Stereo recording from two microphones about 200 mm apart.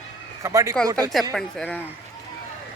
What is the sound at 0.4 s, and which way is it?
Speech, 15° right (ahead or behind).